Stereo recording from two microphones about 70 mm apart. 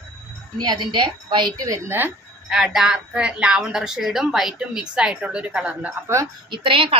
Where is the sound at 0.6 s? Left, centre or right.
Right.